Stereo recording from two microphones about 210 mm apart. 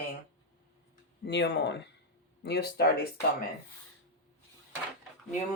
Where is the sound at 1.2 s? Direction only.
55° left (ahead or behind).